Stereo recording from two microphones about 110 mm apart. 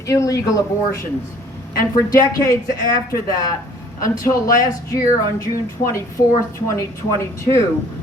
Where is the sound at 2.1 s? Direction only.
30° left (ahead or behind).